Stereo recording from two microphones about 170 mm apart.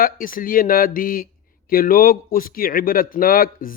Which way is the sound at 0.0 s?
55° left (ahead or behind).